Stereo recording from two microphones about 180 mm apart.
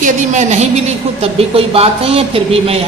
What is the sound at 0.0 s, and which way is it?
A woman's voice, 40° right (ahead or behind).